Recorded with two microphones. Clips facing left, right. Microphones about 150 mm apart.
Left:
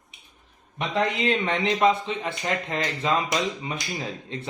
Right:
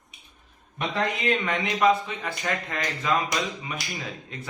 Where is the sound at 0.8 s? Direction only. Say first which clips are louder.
Left 2 dB; 25° left (ahead or behind).